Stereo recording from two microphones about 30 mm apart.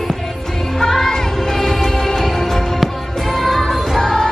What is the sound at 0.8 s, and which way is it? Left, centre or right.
Music, centre.